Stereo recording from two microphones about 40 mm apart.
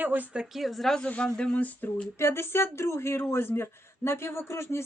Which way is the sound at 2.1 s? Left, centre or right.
Left.